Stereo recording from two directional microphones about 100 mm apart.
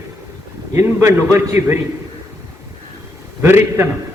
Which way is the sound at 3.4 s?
25° right (ahead or behind).